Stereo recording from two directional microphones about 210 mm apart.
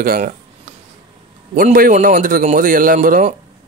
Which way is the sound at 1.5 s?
40° right (ahead or behind).